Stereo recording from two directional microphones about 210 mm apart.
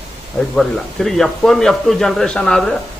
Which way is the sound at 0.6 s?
Centre (ahead or behind).